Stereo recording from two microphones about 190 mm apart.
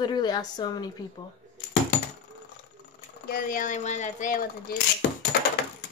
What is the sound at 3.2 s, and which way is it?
Speech, 45° left (ahead or behind).